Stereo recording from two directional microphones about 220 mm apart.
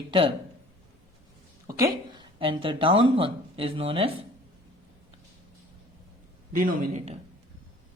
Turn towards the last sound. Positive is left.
turn(degrees=-30)  # may be behind; listen again after turning